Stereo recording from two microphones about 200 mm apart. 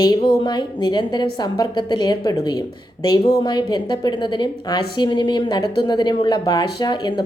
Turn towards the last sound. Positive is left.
turn(degrees=20)  # may be behind; listen again after turning